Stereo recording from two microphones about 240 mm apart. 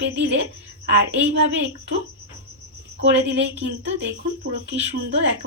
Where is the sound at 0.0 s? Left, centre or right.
Right.